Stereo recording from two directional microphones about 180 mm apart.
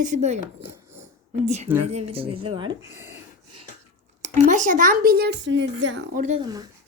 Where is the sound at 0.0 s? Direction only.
40° right (ahead or behind).